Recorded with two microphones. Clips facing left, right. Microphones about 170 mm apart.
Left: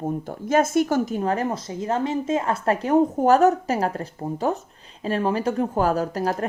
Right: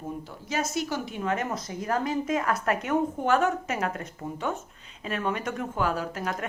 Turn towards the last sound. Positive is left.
turn(degrees=35)  # may be behind; listen again after turning